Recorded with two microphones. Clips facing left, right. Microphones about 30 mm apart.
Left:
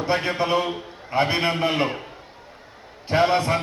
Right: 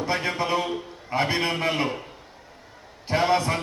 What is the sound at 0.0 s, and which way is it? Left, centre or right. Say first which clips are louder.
A man's voice: left 3 dB; left.